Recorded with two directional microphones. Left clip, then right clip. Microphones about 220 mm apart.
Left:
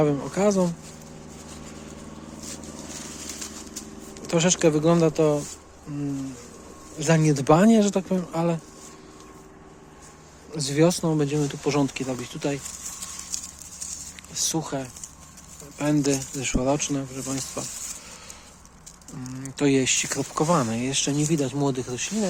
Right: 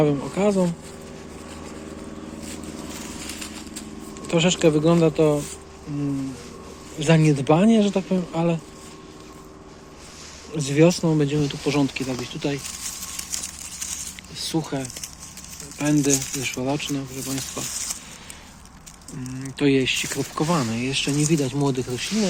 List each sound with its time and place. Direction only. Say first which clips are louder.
0.0 s speech: right 1 dB; 20° left (ahead or behind)
4.3 s speech: right 2 dB; 15° left (ahead or behind)
7.0 s speech: right 2 dB; 10° left (ahead or behind)
7.3 s speech: even; 20° left (ahead or behind)
10.6 s speech: right 3 dB; 10° left (ahead or behind)
14.4 s speech: right 1 dB; 10° left (ahead or behind)
19.5 s speech: right 2 dB; 20° left (ahead or behind)